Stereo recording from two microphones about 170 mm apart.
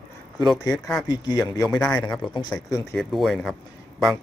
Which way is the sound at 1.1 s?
25° left (ahead or behind).